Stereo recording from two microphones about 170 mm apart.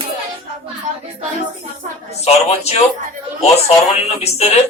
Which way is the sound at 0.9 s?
45° right (ahead or behind).